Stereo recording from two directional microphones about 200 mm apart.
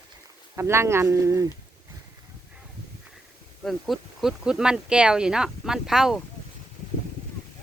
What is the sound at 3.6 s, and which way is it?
Speech, centre (ahead or behind).